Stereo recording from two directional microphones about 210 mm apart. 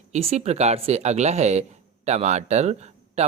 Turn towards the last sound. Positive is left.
turn(degrees=-30)  # may be behind; listen again after turning